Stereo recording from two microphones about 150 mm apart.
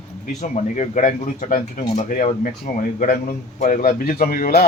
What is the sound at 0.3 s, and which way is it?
Speech, 55° left (ahead or behind).